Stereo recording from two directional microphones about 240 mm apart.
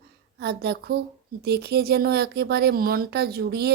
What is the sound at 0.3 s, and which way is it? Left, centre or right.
Speech, right.